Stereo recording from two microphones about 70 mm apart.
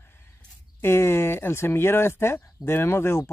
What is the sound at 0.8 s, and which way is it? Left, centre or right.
Speech, left.